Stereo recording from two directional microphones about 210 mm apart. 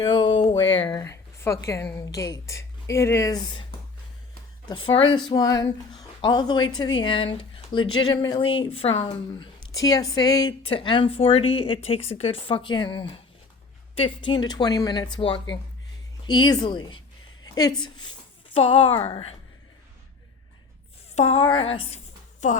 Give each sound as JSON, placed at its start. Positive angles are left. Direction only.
{"t": 0.0, "sound": "a sound", "side_deg": 20}
{"t": 0.7, "sound": "a woman's voice", "side_deg": 20}
{"t": 4.7, "sound": "a woman's voice", "side_deg": 25}
{"t": 21.2, "sound": "a woman's voice", "side_deg": 30}